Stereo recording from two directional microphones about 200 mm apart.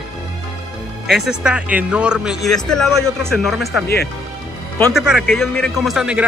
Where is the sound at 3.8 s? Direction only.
50° left (ahead or behind).